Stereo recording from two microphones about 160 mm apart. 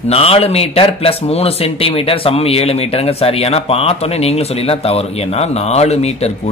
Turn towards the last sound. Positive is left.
turn(degrees=40)  # may be behind; listen again after turning